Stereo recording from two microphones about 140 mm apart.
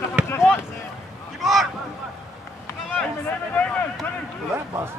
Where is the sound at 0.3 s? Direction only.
15° left (ahead or behind).